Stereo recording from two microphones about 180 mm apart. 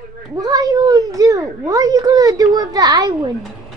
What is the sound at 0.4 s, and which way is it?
Speech, 20° right (ahead or behind).